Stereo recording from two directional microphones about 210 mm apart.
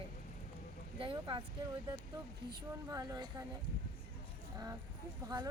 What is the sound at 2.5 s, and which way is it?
Speech, 15° right (ahead or behind).